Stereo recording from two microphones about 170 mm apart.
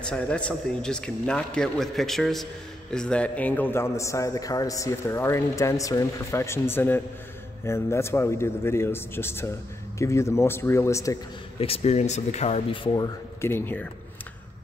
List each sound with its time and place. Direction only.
0.0 s a man's voice: 5° left (ahead or behind)
11.6 s speech: 35° left (ahead or behind)
12.9 s speech: 25° left (ahead or behind)
13.5 s a man's voice: 10° left (ahead or behind)